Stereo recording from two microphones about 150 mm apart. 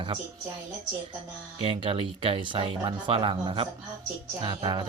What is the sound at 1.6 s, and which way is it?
Speech, 35° right (ahead or behind).